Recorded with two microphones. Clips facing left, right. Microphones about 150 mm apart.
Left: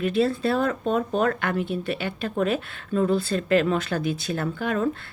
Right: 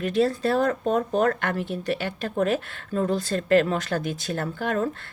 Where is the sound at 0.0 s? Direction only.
45° right (ahead or behind).